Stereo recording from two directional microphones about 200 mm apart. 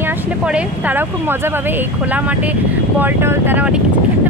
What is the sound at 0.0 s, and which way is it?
Speech, 10° right (ahead or behind).